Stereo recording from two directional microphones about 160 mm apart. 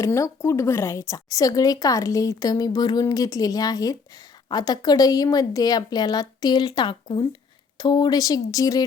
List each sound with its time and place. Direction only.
0.0 s a woman's voice: 20° left (ahead or behind)